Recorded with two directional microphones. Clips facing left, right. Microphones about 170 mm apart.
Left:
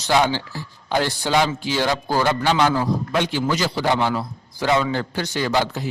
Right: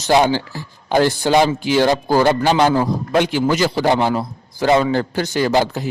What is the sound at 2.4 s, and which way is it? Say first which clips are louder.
A man's voice: right 4 dB; 40° right (ahead or behind).